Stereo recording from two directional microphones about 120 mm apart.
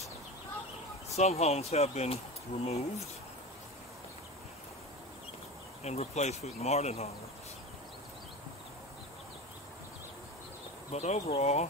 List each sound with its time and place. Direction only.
1.1 s speech: 60° left (ahead or behind)
5.9 s speech: 70° left (ahead or behind)
10.9 s speech: 65° left (ahead or behind)